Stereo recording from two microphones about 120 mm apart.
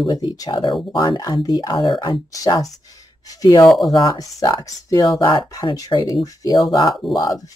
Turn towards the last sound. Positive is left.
turn(degrees=30)  # may be behind; listen again after turning